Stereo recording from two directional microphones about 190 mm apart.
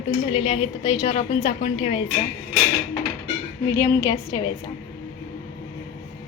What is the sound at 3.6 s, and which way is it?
Speech, 15° left (ahead or behind).